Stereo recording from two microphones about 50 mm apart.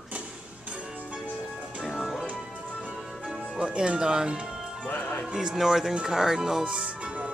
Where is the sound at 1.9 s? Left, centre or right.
Centre.